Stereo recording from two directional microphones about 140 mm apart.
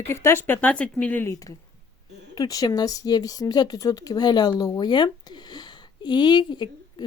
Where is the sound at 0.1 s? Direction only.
20° left (ahead or behind).